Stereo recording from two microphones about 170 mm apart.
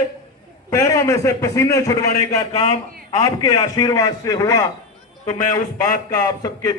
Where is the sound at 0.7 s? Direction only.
15° left (ahead or behind).